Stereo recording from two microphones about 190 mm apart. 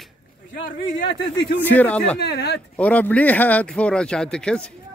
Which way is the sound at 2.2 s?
60° left (ahead or behind).